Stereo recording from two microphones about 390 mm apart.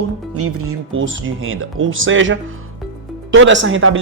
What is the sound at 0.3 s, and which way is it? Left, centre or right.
Speech, right.